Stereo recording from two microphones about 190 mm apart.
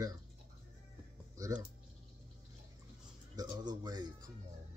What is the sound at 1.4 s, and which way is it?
Speech, 15° right (ahead or behind).